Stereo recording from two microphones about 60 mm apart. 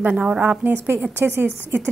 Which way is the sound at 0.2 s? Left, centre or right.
Centre.